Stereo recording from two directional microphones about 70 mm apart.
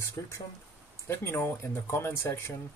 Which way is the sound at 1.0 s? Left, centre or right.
Left.